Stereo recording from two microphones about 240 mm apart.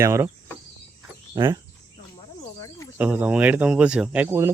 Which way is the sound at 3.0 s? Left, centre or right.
Centre.